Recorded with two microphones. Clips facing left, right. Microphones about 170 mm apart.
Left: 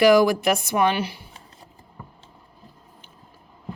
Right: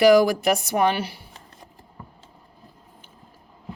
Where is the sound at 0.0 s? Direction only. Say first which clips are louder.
Even; 40° right (ahead or behind).